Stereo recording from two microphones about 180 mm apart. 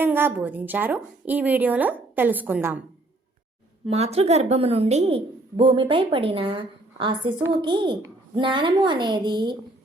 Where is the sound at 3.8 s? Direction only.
35° right (ahead or behind).